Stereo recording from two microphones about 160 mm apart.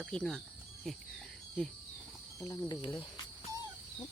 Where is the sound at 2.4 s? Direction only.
20° left (ahead or behind).